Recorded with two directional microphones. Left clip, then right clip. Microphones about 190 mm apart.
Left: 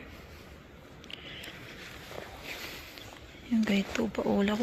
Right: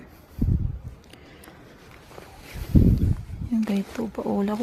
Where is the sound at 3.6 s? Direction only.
25° right (ahead or behind).